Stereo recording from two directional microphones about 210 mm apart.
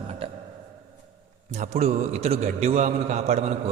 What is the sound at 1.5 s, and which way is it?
A man's voice, 30° right (ahead or behind).